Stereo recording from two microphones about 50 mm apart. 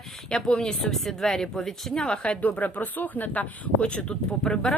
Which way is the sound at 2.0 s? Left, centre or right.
Left.